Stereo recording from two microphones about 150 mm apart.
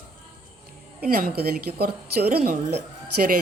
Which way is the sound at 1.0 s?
80° right.